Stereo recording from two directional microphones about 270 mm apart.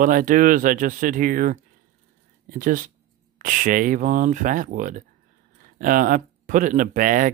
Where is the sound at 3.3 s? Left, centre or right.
Right.